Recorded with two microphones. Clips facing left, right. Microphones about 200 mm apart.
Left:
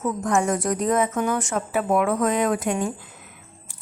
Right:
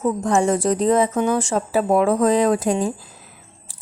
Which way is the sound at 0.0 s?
30° right (ahead or behind).